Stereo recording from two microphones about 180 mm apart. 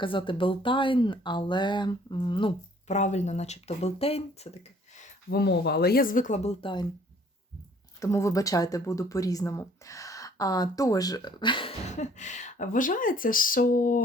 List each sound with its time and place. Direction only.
0.0 s speech: 30° left (ahead or behind)
2.8 s speech: 40° left (ahead or behind)
5.3 s speech: 65° left (ahead or behind); by 6.8 s 30° left (ahead or behind)
7.9 s speech: 15° left (ahead or behind)
11.9 s speech: 40° left (ahead or behind)